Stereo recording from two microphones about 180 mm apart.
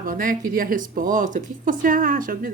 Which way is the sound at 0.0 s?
50° right (ahead or behind).